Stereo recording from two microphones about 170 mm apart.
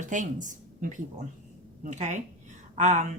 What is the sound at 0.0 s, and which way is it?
Speech, 50° right (ahead or behind).